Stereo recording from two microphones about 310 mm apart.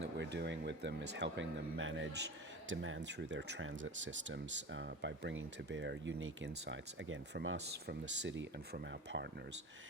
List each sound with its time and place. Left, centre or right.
0.2 s speech: right